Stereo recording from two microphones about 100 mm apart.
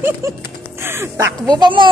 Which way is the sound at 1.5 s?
50° right (ahead or behind).